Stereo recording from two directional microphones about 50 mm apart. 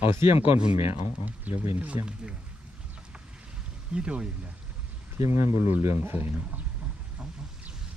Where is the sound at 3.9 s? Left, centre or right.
Centre.